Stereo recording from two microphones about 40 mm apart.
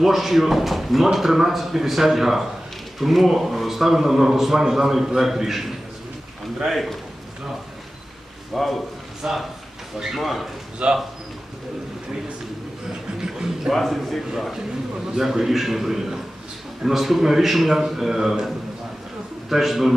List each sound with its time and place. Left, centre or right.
0.0 s a man's voice: centre
6.7 s speech: centre
8.5 s speech: centre
10.8 s speech: right
12.9 s a sound: centre
13.7 s speech: centre
15.0 s a man's voice: centre
19.5 s speech: centre